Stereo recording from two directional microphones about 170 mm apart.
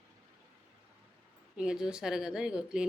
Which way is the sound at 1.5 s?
5° right (ahead or behind).